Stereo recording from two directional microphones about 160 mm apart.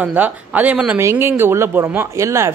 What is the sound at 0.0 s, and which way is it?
Speech, 10° right (ahead or behind).